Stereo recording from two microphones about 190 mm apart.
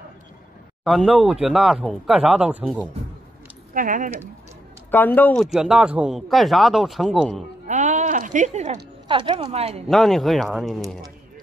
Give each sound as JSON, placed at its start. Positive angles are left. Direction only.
{"t": 0.8, "sound": "speech", "side_deg": 0}
{"t": 3.7, "sound": "speech", "side_deg": -45}
{"t": 4.9, "sound": "speech", "side_deg": 10}
{"t": 5.5, "sound": "speech", "side_deg": -5}
{"t": 7.6, "sound": "a sound", "side_deg": -40}
{"t": 9.0, "sound": "a woman's voice", "side_deg": -25}
{"t": 9.8, "sound": "speech", "side_deg": 0}